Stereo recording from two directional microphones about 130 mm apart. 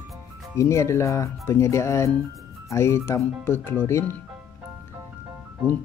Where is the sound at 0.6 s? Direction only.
20° left (ahead or behind).